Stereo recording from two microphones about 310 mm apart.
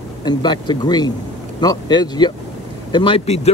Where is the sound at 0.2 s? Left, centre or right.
Centre.